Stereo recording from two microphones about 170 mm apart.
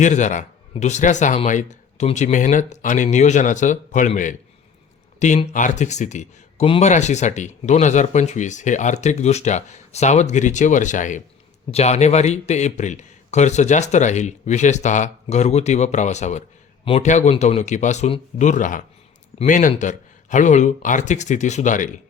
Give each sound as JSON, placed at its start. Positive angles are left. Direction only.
{"t": 0.0, "sound": "a man's voice", "side_deg": 45}